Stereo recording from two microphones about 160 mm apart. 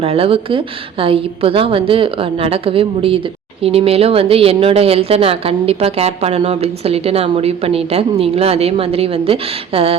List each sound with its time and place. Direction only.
0.0 s speech: 35° right (ahead or behind)